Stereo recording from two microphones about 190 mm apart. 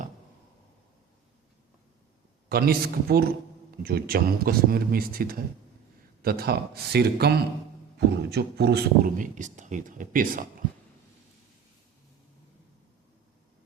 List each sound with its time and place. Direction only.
2.5 s speech: 55° right (ahead or behind)